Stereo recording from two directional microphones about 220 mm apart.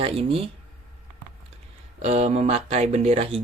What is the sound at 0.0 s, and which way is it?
Speech, 25° right (ahead or behind).